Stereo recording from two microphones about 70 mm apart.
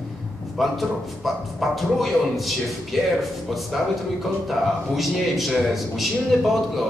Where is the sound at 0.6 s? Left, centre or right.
Centre.